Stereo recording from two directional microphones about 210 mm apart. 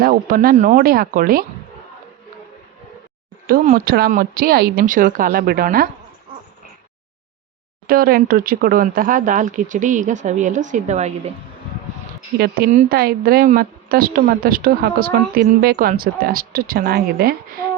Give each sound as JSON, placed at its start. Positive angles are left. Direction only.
{"t": 0.0, "sound": "a woman's voice", "side_deg": -45}
{"t": 3.4, "sound": "a woman's voice", "side_deg": -45}
{"t": 7.9, "sound": "speech", "side_deg": -45}
{"t": 12.4, "sound": "a woman's voice", "side_deg": -45}